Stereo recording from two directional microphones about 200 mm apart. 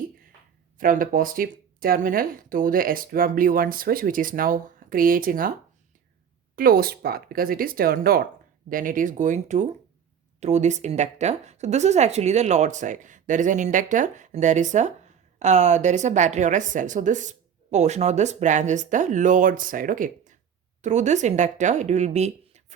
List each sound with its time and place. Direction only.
0.8 s speech: 45° right (ahead or behind)
6.6 s speech: 50° right (ahead or behind)